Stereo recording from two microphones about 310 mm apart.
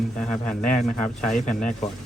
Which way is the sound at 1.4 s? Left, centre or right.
Left.